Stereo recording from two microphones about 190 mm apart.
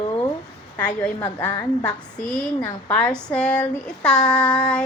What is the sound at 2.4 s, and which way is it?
Speech, 5° left (ahead or behind).